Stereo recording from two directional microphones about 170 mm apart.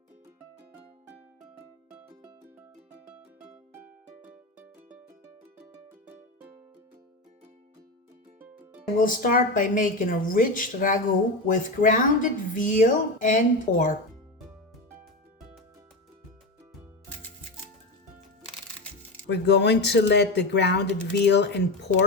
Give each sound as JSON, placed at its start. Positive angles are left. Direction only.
{"t": 1.5, "sound": "music", "side_deg": -10}
{"t": 3.8, "sound": "music", "side_deg": -10}
{"t": 9.0, "sound": "speech", "side_deg": 55}
{"t": 19.3, "sound": "speech", "side_deg": 85}